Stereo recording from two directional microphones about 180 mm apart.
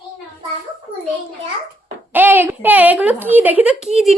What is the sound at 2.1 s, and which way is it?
A woman's voice, 10° right (ahead or behind).